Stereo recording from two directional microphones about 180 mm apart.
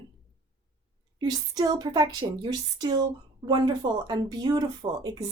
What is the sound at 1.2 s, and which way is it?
Speech, 25° right (ahead or behind).